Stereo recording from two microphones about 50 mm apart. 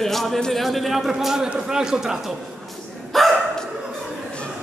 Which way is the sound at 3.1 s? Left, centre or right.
Centre.